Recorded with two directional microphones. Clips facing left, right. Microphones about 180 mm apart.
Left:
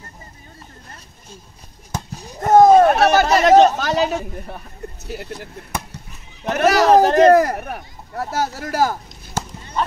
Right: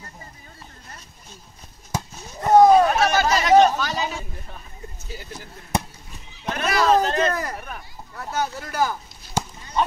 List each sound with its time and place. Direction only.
2.4 s a sound: 45° left (ahead or behind); by 4.6 s 70° left (ahead or behind)
5.0 s speech: 65° left (ahead or behind)
7.3 s speech: 50° left (ahead or behind)
8.2 s speech: 40° left (ahead or behind)
9.4 s clip-clop: 10° right (ahead or behind)